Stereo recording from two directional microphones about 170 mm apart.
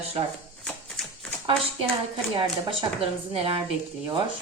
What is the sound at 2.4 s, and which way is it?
A woman's voice, 30° right (ahead or behind).